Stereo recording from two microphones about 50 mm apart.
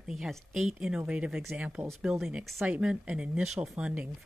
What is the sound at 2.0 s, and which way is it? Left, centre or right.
Speech, centre.